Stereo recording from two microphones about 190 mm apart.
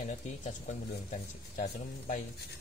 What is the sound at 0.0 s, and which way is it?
Speech, 40° left (ahead or behind).